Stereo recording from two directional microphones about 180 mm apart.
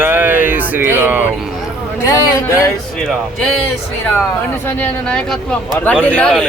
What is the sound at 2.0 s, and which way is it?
Speech, 20° left (ahead or behind).